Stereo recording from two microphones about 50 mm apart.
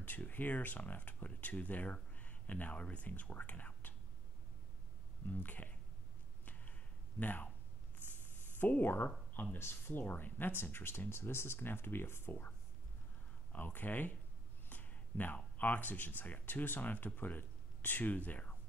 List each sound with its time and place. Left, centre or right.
0.0 s speech: left
5.2 s speech: left
6.4 s a sound: left
7.2 s speech: left
8.1 s a sound: left
9.3 s speech: left
12.3 s speech: left
14.7 s a sound: left
15.6 s speech: left